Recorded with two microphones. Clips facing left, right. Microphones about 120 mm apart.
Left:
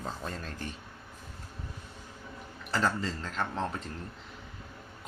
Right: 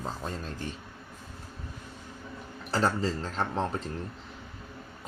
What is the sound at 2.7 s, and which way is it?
Speech, 35° right (ahead or behind).